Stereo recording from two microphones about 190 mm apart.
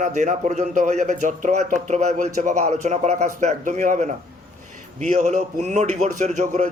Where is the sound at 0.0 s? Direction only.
40° right (ahead or behind).